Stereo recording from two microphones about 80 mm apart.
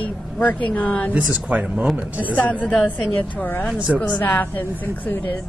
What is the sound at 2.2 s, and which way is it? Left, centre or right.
A woman's voice, left.